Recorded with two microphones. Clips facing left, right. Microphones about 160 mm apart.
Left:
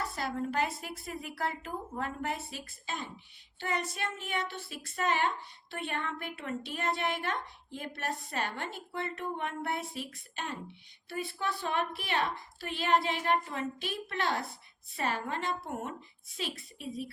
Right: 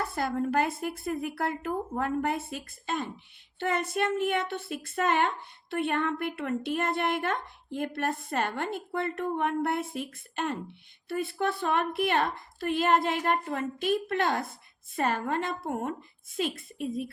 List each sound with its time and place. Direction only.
0.0 s a woman's voice: 55° right (ahead or behind)